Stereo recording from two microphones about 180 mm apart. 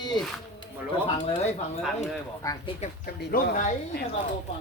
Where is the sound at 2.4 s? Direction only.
20° left (ahead or behind).